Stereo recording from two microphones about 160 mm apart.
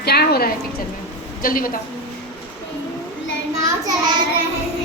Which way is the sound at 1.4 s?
60° left (ahead or behind).